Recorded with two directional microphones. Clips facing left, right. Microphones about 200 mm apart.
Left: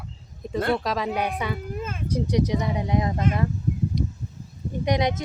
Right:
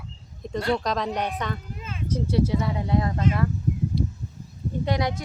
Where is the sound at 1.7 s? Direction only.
50° left (ahead or behind).